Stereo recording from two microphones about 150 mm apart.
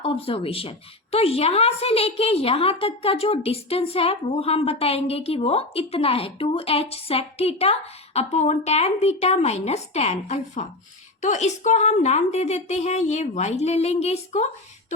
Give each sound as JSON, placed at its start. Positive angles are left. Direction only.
{"t": 0.0, "sound": "a woman's voice", "side_deg": 40}